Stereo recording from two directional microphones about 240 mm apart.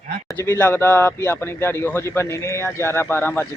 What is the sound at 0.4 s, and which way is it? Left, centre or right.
A man's voice, centre.